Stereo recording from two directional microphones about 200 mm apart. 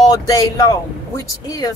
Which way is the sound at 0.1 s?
20° left (ahead or behind).